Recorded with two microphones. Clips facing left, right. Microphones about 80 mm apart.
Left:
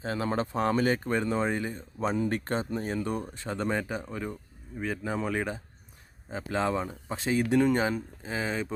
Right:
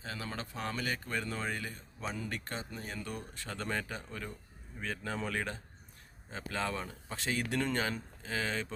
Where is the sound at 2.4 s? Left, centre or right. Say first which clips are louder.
Left 11 dB; left.